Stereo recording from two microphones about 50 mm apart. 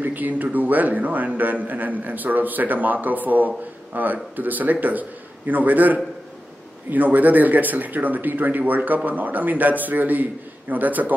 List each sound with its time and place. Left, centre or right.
0.0 s a man's voice: right